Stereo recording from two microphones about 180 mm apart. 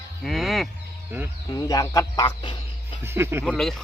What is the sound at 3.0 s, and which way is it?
Speech, 15° right (ahead or behind).